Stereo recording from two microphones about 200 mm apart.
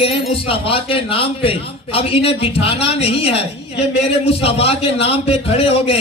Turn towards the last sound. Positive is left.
turn(degrees=30)  # may be behind; listen again after turning